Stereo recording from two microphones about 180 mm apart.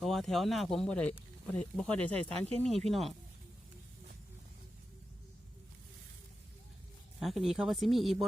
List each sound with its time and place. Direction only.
0.0 s speech: centre (ahead or behind)
7.2 s speech: centre (ahead or behind)